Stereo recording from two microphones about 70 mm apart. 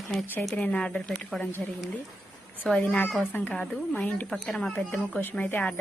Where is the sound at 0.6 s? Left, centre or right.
Centre.